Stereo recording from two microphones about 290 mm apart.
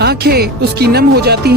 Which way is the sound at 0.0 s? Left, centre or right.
Right.